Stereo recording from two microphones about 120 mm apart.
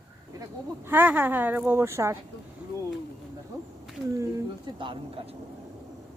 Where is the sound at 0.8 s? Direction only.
15° right (ahead or behind).